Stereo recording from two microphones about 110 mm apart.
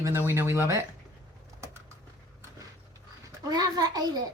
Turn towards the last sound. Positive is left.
turn(degrees=-35)  # may be behind; listen again after turning